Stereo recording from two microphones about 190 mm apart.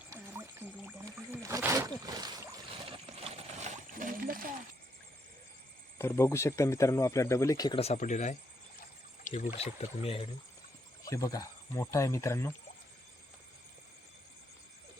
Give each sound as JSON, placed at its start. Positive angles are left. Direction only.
{"t": 0.1, "sound": "wild animals", "side_deg": -10}
{"t": 2.9, "sound": "a sound", "side_deg": -35}
{"t": 6.0, "sound": "speech", "side_deg": 15}
{"t": 7.8, "sound": "speech", "side_deg": 35}
{"t": 11.0, "sound": "speech", "side_deg": 15}